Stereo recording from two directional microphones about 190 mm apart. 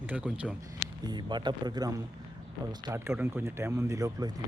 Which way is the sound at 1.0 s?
20° right (ahead or behind).